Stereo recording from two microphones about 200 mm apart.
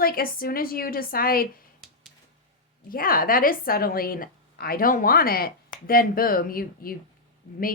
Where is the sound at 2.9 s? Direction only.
45° left (ahead or behind).